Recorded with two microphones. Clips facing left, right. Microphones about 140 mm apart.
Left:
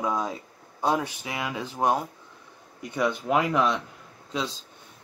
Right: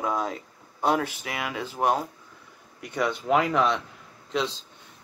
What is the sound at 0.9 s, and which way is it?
Speech, 15° left (ahead or behind).